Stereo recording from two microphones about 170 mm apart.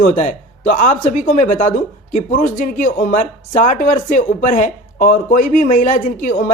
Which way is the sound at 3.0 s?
50° left (ahead or behind).